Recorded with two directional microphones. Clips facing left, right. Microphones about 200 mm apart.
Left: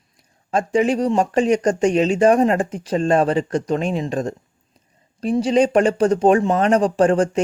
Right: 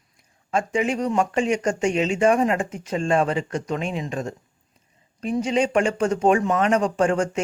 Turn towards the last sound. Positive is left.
turn(degrees=35)  # may be behind; listen again after turning